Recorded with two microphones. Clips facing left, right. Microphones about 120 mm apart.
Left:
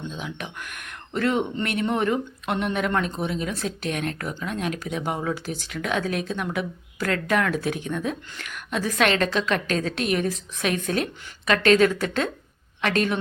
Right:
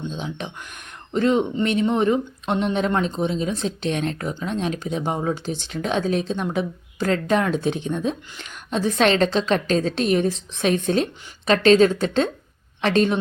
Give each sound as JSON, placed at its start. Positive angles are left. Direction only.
{"t": 0.1, "sound": "speech", "side_deg": -30}